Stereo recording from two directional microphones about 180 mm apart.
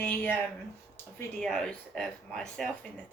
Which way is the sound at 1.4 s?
5° left (ahead or behind).